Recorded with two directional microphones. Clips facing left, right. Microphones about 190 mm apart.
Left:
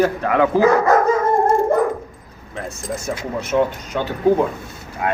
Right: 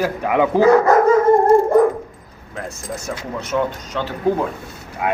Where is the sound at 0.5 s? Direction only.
20° right (ahead or behind).